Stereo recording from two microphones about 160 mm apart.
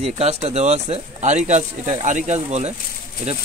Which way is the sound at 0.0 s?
40° right (ahead or behind).